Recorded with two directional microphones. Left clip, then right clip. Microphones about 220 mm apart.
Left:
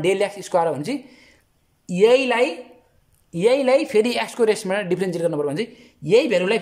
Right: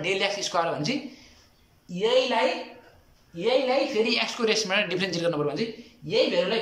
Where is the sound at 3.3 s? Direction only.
40° left (ahead or behind).